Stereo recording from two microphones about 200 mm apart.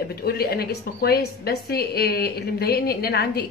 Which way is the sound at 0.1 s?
50° left (ahead or behind).